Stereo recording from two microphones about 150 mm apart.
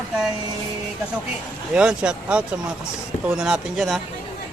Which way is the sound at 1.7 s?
5° right (ahead or behind).